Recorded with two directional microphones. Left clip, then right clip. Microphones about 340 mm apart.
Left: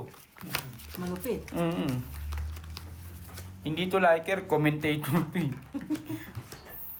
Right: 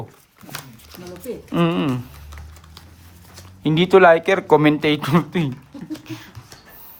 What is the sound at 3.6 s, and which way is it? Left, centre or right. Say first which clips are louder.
Speech: right 13 dB; centre.